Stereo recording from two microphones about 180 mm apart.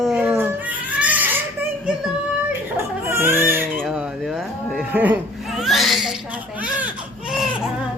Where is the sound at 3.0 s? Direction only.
10° right (ahead or behind).